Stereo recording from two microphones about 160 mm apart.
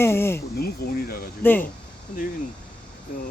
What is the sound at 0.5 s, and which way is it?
Speech, 70° left (ahead or behind).